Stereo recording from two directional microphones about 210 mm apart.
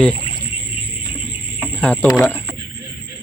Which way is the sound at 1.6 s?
5° left (ahead or behind).